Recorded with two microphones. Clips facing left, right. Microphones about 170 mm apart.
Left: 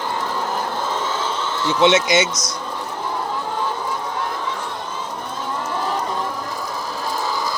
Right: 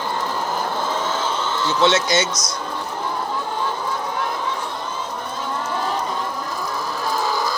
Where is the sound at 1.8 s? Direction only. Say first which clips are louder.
Left 3 dB; 20° left (ahead or behind).